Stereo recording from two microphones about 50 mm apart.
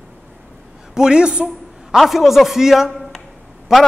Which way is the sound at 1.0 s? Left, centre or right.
Centre.